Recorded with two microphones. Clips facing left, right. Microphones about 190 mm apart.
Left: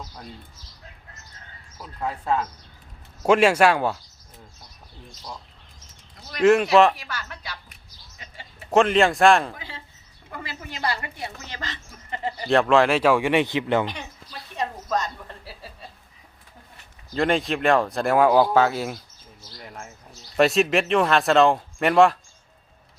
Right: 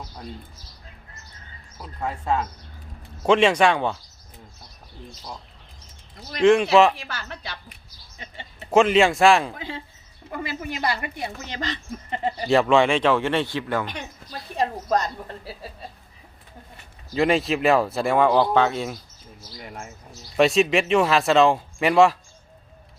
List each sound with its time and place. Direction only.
2.0 s speech: centre (ahead or behind)
6.4 s speech: 5° left (ahead or behind)
6.9 s speech: 30° right (ahead or behind)
8.7 s speech: centre (ahead or behind)
9.6 s speech: 20° right (ahead or behind)
12.5 s speech: centre (ahead or behind); by 13.8 s 20° left (ahead or behind)
14.5 s a sound: 35° right (ahead or behind)
17.2 s speech: centre (ahead or behind)